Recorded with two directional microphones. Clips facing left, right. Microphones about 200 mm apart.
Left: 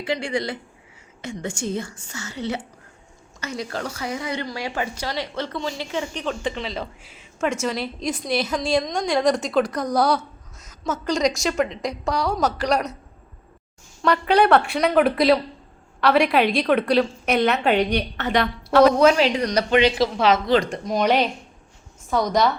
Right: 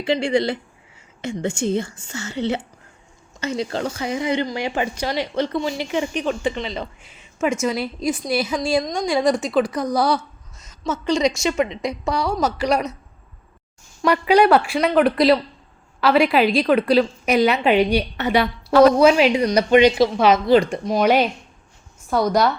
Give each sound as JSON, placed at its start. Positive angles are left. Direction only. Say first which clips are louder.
{"t": 0.0, "sound": "speech", "louder": "right 6 dB", "side_deg": -30}
{"t": 6.4, "sound": "a woman's voice", "louder": "right 3 dB", "side_deg": 0}
{"t": 14.0, "sound": "a woman's voice", "louder": "right 3 dB", "side_deg": -10}